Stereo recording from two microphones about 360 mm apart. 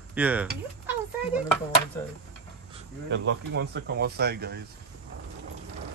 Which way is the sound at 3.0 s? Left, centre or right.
Right.